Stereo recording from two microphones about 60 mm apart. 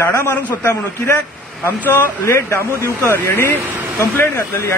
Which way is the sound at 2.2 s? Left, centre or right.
Left.